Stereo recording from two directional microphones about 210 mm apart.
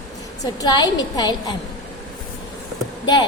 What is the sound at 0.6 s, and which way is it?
Speech, 20° left (ahead or behind).